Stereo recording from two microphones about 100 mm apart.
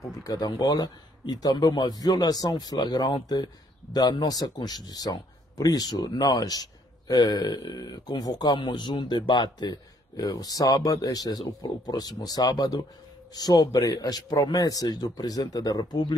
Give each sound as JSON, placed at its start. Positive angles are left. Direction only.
{"t": 0.2, "sound": "a man's voice", "side_deg": 40}